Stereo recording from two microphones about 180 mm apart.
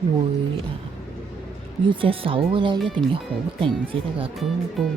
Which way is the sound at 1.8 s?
30° right (ahead or behind).